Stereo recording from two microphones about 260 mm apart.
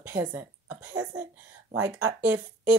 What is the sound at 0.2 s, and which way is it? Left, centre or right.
A woman's voice, centre.